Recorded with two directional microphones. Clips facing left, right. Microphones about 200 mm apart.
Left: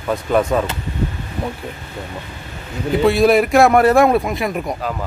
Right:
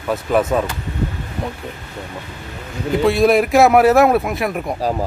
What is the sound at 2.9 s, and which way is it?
Speech, centre (ahead or behind).